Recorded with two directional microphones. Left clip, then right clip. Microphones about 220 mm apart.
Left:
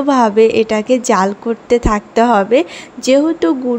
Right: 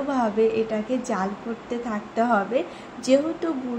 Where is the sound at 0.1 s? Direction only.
50° left (ahead or behind).